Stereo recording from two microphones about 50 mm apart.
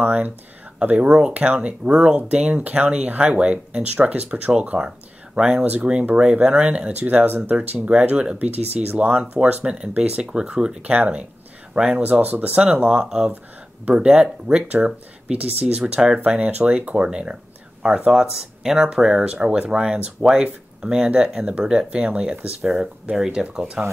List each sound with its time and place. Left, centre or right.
0.0 s speech: right
4.7 s speech: centre
11.7 s speech: centre
12.0 s speech: right
13.0 s speech: centre
16.3 s speech: right
22.6 s speech: centre
23.3 s speech: centre